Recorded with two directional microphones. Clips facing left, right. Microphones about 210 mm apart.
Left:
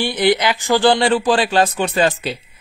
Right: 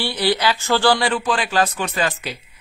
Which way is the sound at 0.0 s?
20° left (ahead or behind).